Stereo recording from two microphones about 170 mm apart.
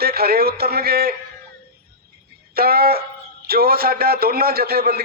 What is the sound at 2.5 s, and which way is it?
A man's voice, 65° right (ahead or behind).